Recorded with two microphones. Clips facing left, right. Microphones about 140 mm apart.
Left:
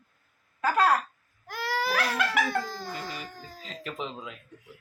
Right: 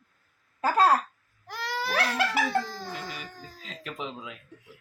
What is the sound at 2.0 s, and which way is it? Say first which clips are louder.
Laughter: right 1 dB; 30° right (ahead or behind).